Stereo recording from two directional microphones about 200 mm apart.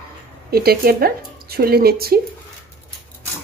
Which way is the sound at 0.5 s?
50° right (ahead or behind).